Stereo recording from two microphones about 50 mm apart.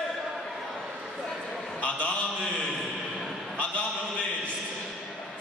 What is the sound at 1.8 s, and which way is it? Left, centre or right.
Mantra, left.